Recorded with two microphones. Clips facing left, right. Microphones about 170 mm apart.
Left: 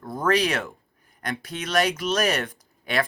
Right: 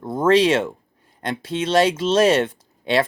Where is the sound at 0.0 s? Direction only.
25° right (ahead or behind).